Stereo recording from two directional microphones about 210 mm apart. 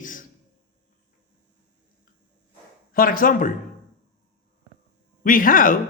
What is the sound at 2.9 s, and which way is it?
Speech, 40° left (ahead or behind).